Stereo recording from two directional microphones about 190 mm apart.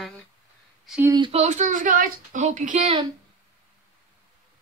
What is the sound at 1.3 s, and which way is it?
A woman's voice, 40° right (ahead or behind).